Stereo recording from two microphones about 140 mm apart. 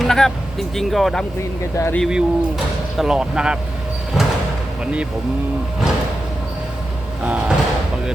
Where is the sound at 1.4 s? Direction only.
20° left (ahead or behind).